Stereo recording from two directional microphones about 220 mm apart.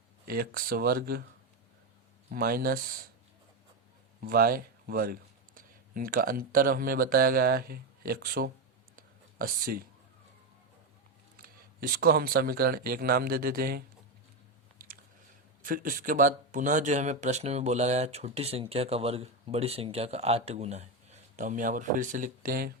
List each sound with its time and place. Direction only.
0.3 s speech: 40° right (ahead or behind)
2.3 s speech: 40° right (ahead or behind)
4.2 s speech: 40° right (ahead or behind)
9.0 s a sound: 40° right (ahead or behind)
11.3 s speech: 45° right (ahead or behind)
15.6 s speech: 40° right (ahead or behind)